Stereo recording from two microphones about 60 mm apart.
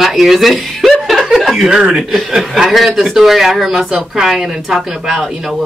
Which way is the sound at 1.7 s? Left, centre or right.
Centre.